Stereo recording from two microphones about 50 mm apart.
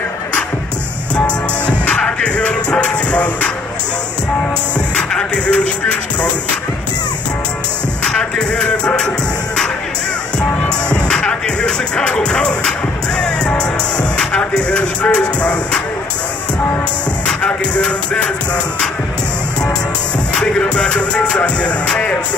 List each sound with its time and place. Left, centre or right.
2.0 s music: left
5.1 s music: left
8.2 s music: left
10.9 s music: centre
14.5 s music: left
17.4 s music: left
20.3 s music: centre